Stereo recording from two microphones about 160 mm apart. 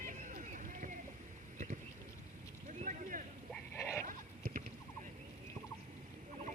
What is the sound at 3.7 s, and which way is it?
Goat, 15° left (ahead or behind).